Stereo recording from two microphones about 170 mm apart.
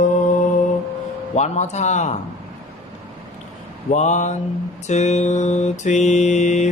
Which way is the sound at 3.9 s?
45° left (ahead or behind).